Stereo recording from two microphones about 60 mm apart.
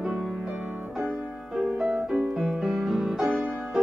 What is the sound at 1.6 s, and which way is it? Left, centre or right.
Music, centre.